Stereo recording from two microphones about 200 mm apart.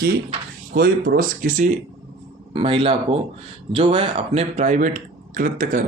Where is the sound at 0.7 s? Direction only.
50° right (ahead or behind).